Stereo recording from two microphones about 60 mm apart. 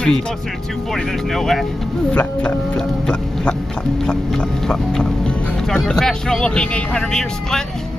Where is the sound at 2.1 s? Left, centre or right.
Centre.